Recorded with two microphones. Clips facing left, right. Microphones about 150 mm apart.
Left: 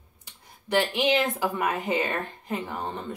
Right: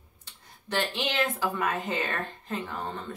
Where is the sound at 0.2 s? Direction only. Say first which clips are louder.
Left 2 dB; 10° left (ahead or behind).